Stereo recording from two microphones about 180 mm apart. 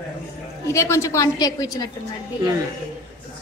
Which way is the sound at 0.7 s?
15° left (ahead or behind).